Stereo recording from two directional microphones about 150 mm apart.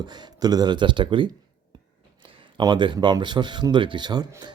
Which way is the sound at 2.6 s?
30° right (ahead or behind).